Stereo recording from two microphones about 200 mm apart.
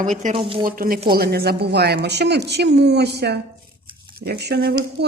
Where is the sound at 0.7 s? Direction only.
45° right (ahead or behind).